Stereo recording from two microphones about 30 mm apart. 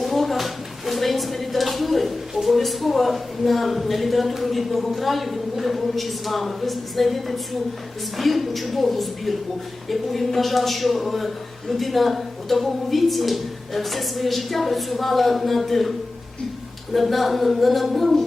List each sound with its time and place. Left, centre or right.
0.0 s a sound: centre
2.3 s a woman's voice: centre
16.9 s a woman's voice: centre